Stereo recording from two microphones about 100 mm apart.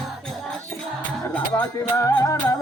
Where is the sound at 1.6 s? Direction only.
35° left (ahead or behind).